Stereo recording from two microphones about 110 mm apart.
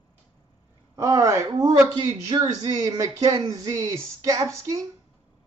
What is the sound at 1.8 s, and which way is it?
Speech, 35° right (ahead or behind).